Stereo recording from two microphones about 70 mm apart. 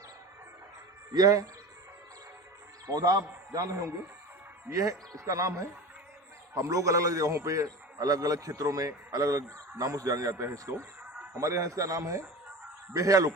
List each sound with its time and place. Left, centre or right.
1.1 s a man's voice: right
2.9 s a man's voice: right